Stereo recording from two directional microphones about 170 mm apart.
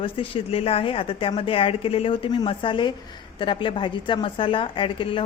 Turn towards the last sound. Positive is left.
turn(degrees=30)  # may be behind; listen again after turning